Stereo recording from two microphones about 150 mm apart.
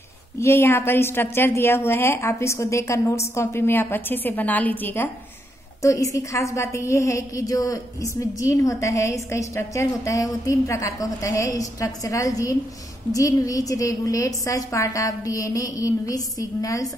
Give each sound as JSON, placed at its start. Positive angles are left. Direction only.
{"t": 0.4, "sound": "a woman's voice", "side_deg": 15}